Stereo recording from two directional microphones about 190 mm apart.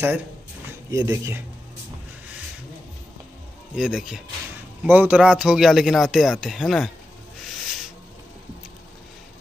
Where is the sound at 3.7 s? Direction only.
5° right (ahead or behind).